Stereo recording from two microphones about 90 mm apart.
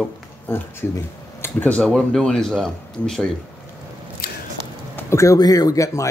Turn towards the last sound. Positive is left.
turn(degrees=35)  # may be behind; listen again after turning